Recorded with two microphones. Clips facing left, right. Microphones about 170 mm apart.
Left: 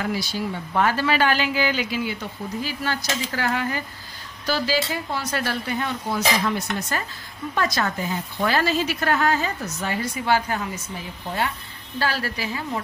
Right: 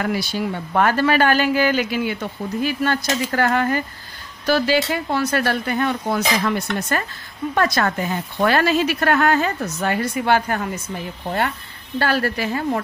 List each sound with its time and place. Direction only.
0.0 s a woman's voice: 60° right (ahead or behind)
12.0 s a woman's voice: 55° right (ahead or behind)